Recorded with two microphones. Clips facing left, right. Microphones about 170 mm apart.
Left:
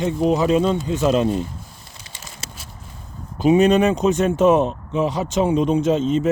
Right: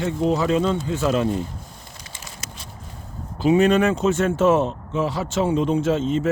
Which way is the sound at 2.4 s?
30° left (ahead or behind).